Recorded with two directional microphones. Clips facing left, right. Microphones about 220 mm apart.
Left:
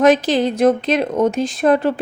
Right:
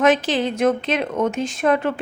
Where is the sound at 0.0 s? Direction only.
40° left (ahead or behind).